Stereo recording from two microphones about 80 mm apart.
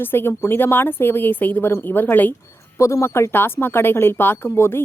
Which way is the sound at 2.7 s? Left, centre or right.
Left.